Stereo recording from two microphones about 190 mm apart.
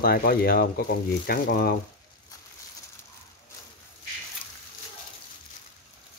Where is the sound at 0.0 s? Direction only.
50° left (ahead or behind).